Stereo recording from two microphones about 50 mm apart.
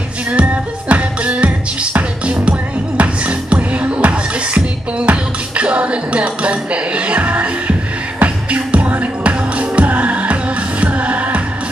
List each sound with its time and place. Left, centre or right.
0.3 s music: right